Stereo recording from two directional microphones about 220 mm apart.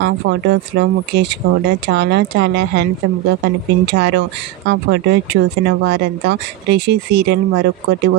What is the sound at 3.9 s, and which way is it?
Speech, 50° right (ahead or behind).